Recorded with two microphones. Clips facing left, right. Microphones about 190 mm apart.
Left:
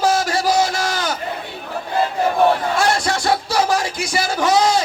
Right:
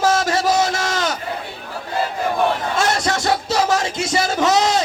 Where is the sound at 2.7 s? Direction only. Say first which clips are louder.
Left 1 dB; 20° right (ahead or behind).